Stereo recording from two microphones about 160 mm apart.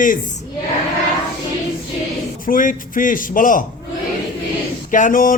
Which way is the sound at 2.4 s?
55° left (ahead or behind).